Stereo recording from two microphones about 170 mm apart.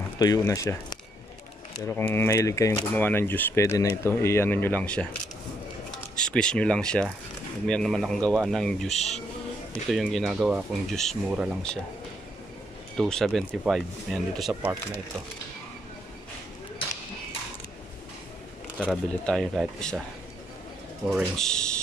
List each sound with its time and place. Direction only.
0.2 s speech: 20° left (ahead or behind)
6.1 s speech: 5° left (ahead or behind)
12.9 s speech: centre (ahead or behind)
18.8 s speech: 5° left (ahead or behind)
21.1 s speech: centre (ahead or behind)